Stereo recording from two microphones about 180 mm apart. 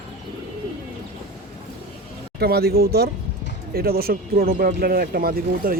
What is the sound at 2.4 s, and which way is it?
Speech, 60° right (ahead or behind).